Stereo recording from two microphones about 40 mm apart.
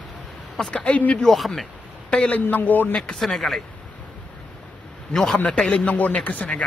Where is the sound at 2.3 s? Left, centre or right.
Left.